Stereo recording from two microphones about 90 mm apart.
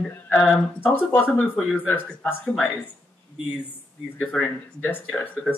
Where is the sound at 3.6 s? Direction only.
20° left (ahead or behind).